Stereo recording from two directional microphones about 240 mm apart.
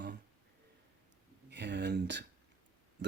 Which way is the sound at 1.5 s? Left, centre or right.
Right.